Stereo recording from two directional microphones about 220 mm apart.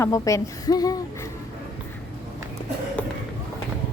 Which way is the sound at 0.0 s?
15° left (ahead or behind).